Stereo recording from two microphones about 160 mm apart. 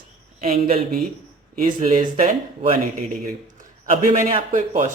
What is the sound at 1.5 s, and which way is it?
Speech, 55° right (ahead or behind).